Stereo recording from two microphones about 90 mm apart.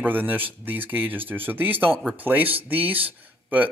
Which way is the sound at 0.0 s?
20° right (ahead or behind).